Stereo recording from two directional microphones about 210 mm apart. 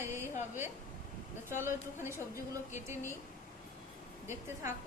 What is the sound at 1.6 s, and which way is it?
Speech, 10° right (ahead or behind).